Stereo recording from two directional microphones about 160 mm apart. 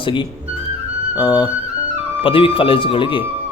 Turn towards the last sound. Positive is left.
turn(degrees=30)  # may be behind; listen again after turning